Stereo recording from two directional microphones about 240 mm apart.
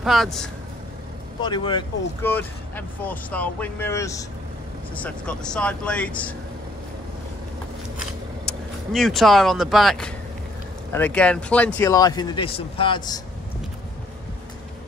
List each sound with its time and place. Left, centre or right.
0.0 s speech: centre
1.4 s speech: centre
2.2 s speech: centre
8.5 s speech: centre